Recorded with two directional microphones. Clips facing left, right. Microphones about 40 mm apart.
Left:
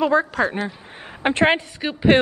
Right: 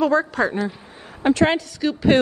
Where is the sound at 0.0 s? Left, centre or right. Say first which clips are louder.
Even; left.